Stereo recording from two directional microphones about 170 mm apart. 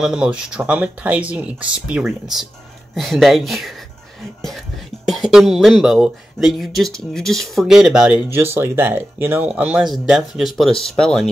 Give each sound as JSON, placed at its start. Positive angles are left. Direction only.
{"t": 0.0, "sound": "speech", "side_deg": -5}
{"t": 5.0, "sound": "speech", "side_deg": 0}